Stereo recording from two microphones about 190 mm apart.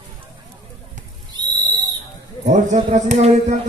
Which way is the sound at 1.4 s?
20° right (ahead or behind).